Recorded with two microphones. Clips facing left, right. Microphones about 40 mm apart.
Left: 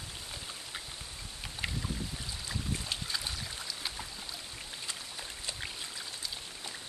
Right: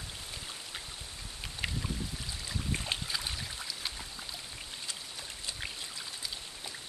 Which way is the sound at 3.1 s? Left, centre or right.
Centre.